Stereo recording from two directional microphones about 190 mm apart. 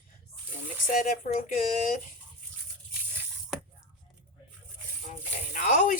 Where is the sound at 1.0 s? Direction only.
45° left (ahead or behind).